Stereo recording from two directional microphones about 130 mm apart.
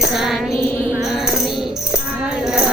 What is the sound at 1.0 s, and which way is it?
Music, centre (ahead or behind).